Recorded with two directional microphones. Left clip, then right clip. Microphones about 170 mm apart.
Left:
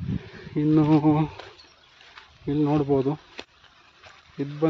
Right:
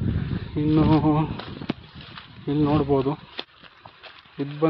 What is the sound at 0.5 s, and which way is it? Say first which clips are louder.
Speech: even; 30° left (ahead or behind).